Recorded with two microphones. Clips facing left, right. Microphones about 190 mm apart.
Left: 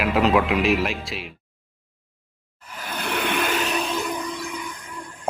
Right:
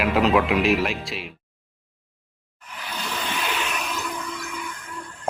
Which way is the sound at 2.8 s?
55° left (ahead or behind).